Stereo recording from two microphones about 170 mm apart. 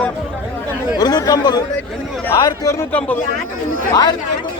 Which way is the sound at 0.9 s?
25° left (ahead or behind).